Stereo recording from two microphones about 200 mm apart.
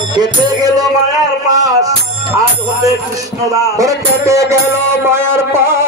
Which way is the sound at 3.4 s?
15° right (ahead or behind).